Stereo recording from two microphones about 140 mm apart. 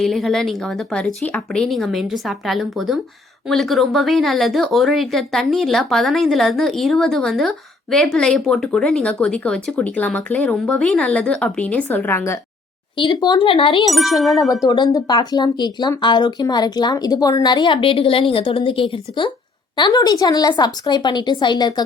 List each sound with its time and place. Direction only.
0.0 s speech: centre (ahead or behind); by 12.4 s 20° left (ahead or behind)
13.0 s speech: 35° left (ahead or behind)
13.8 s speech: centre (ahead or behind)
14.7 s speech: 30° left (ahead or behind)